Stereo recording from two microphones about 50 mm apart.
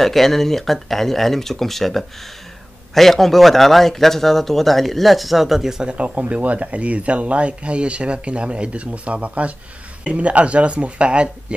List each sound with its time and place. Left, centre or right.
0.0 s speech: centre; by 11.2 s right